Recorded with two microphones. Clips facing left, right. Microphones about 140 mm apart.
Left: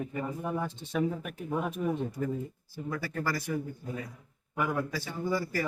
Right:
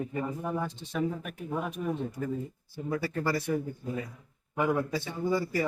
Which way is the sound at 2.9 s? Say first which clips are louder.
Right 3 dB; 25° right (ahead or behind).